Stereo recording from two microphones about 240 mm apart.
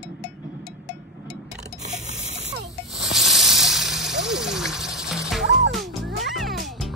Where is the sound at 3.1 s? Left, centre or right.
Centre.